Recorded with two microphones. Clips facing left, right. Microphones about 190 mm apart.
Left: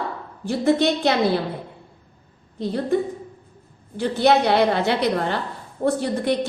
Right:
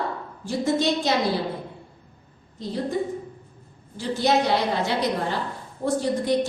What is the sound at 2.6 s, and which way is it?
Speech, 60° left (ahead or behind).